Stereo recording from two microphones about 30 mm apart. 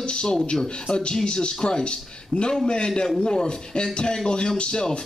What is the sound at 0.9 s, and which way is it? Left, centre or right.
A man's voice, left.